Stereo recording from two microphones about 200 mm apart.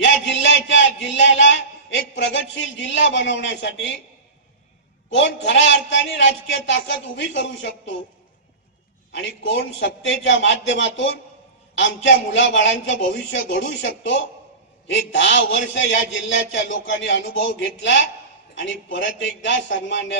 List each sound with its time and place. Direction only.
0.0 s a man's voice: 65° left (ahead or behind)
5.1 s a man's voice: 65° left (ahead or behind)
9.1 s a man's voice: 65° left (ahead or behind)